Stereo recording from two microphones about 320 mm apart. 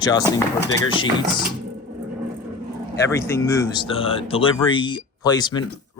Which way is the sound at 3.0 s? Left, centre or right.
Centre.